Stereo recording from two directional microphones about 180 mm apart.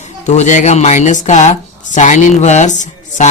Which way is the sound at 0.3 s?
40° left (ahead or behind).